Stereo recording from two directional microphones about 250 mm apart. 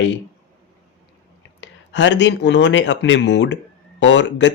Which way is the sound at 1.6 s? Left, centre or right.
Left.